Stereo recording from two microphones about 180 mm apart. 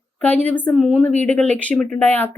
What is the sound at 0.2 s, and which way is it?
Speech, 10° left (ahead or behind).